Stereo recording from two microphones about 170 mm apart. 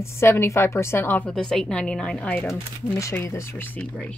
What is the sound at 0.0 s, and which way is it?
A woman's voice, 15° left (ahead or behind).